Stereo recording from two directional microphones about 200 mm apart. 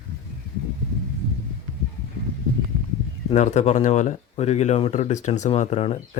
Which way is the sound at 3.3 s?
35° left (ahead or behind).